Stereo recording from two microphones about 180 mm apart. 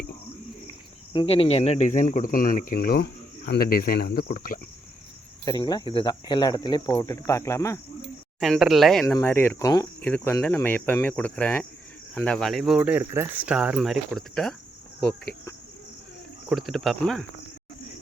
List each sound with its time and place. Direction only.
1.1 s speech: 30° left (ahead or behind); by 4.6 s 50° left (ahead or behind)
5.5 s speech: 20° left (ahead or behind)
8.4 s speech: centre (ahead or behind)
9.0 s cricket: 10° left (ahead or behind)
12.1 s speech: 5° left (ahead or behind)
16.5 s speech: centre (ahead or behind)